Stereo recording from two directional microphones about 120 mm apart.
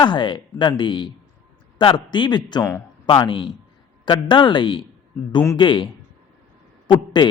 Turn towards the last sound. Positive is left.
turn(degrees=40)  # may be behind; listen again after turning